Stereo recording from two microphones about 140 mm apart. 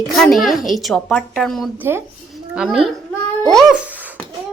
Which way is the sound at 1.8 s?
15° right (ahead or behind).